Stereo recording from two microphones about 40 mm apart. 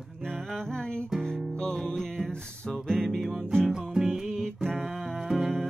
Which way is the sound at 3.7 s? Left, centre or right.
Centre.